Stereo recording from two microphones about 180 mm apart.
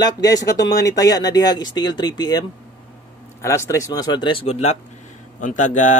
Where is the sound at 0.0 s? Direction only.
20° left (ahead or behind).